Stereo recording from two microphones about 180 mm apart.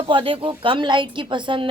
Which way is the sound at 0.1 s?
30° right (ahead or behind).